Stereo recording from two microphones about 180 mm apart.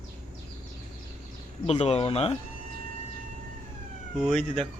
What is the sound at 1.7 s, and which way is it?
Speech, 35° left (ahead or behind).